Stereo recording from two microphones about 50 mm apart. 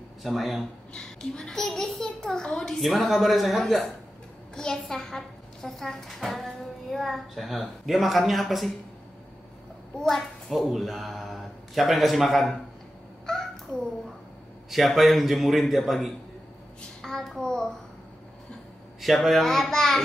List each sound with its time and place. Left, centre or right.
0.2 s a child's voice: centre
0.9 s a child's voice: centre
2.8 s a child's voice: centre
10.0 s a child's voice: centre
10.7 s a man's voice: centre
14.7 s a child's voice: centre
18.9 s a child's voice: centre